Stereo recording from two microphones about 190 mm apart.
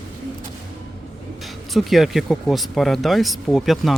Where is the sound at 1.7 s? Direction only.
Centre (ahead or behind).